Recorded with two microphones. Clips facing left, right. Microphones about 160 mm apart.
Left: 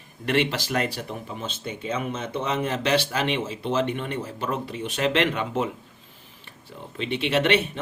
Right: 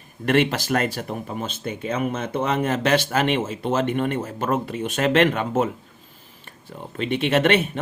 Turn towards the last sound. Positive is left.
turn(degrees=-45)  # may be behind; listen again after turning